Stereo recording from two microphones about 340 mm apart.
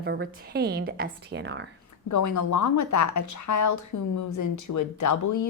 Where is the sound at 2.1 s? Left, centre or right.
Left.